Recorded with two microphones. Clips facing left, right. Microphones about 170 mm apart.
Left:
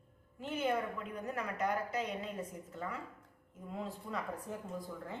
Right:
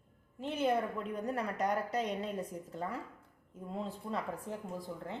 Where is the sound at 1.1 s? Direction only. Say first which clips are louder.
Right 4 dB; 35° right (ahead or behind).